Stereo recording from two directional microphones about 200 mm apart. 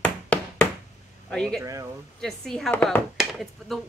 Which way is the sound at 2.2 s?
Centre (ahead or behind).